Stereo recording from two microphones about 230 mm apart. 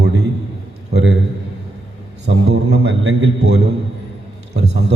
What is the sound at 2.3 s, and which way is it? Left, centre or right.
A man's voice, right.